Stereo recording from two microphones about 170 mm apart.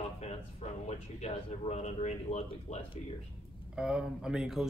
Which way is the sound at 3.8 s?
5° right (ahead or behind).